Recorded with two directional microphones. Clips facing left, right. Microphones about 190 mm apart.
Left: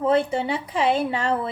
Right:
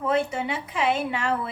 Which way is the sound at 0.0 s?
30° left (ahead or behind).